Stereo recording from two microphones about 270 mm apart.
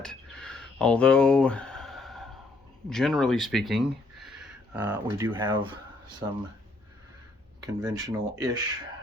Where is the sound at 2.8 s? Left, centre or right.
Centre.